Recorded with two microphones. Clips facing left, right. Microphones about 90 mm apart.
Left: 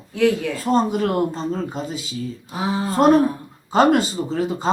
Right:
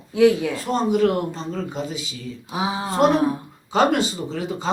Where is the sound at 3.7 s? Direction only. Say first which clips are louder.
Left 3 dB; 45° left (ahead or behind).